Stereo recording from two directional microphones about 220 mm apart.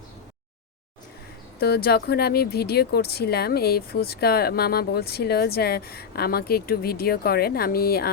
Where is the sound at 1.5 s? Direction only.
45° left (ahead or behind).